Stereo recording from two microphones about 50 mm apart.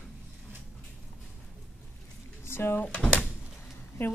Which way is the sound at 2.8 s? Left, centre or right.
Left.